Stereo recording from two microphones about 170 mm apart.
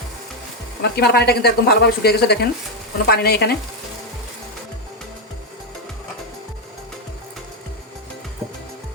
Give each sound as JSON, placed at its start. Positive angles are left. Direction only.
{"t": 0.8, "sound": "a woman's voice", "side_deg": 75}